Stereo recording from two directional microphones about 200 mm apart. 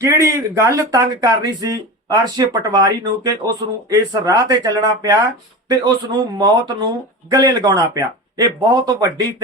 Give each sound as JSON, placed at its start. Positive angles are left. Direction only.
{"t": 0.0, "sound": "speech", "side_deg": -15}